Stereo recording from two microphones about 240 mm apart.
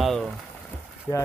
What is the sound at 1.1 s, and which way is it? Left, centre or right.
Speech, centre.